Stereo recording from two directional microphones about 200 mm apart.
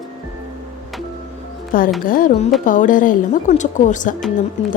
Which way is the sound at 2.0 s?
45° left (ahead or behind).